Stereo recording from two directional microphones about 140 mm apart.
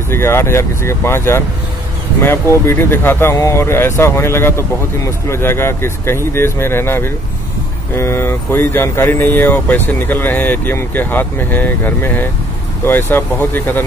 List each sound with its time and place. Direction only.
0.1 s speech: 20° left (ahead or behind)